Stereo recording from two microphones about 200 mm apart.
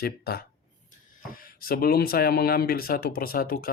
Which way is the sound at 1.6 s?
50° left (ahead or behind).